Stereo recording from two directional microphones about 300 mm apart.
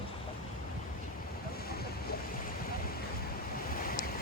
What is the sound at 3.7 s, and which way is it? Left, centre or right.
Waves, left.